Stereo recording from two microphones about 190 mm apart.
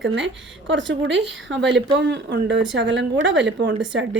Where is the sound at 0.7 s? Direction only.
75° right (ahead or behind).